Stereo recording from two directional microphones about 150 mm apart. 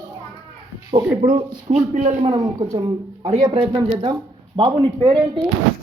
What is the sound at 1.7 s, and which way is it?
Speech, 45° right (ahead or behind).